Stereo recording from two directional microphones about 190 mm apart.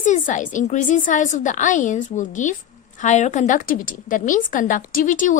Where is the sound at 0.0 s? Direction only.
40° left (ahead or behind).